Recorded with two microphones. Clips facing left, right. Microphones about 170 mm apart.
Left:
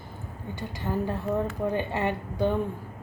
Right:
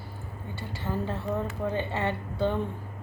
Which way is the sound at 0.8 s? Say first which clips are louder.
Left 2 dB; 15° left (ahead or behind).